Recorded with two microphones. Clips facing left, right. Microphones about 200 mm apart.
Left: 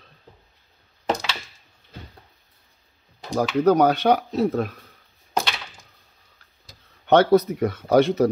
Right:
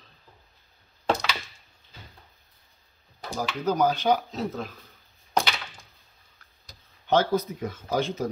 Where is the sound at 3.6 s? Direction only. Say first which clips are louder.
Left 5 dB; 65° left (ahead or behind).